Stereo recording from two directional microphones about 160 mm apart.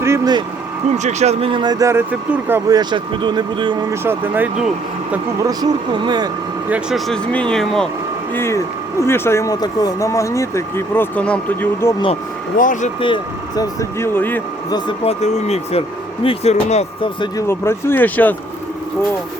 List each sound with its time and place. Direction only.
0.0 s vehicle: 15° right (ahead or behind)
0.9 s speech: 45° right (ahead or behind); by 2.7 s 15° right (ahead or behind)
2.7 s speech: 30° right (ahead or behind)
4.0 s speech: 15° right (ahead or behind)
5.4 s speech: 25° right (ahead or behind)
6.7 s speech: 5° right (ahead or behind)
7.1 s speech: 5° left (ahead or behind)
8.4 s speech: 15° left (ahead or behind)
12.5 s speech: 55° left (ahead or behind)
13.6 s speech: 20° left (ahead or behind)
14.7 s speech: 30° left (ahead or behind)
15.2 s speech: 40° left (ahead or behind)
17.5 s speech: 15° left (ahead or behind)